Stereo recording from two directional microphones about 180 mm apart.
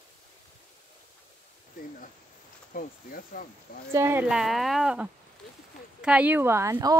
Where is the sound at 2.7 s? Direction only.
50° left (ahead or behind).